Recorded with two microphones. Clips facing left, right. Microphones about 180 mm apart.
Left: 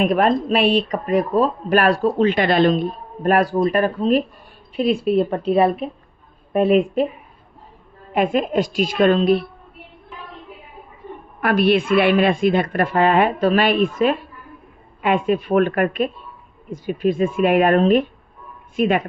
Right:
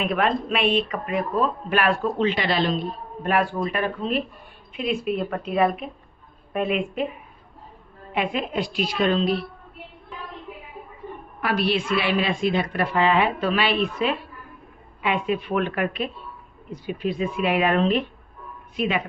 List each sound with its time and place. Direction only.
0.0 s speech: 40° left (ahead or behind)
3.2 s speech: 40° left (ahead or behind)
8.1 s a woman's voice: 45° left (ahead or behind)
11.3 s a woman's voice: 55° left (ahead or behind)